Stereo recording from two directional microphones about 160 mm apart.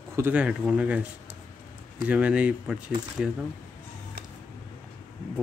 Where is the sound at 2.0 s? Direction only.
10° right (ahead or behind).